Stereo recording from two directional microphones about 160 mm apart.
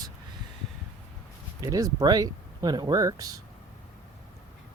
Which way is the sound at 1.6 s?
20° right (ahead or behind).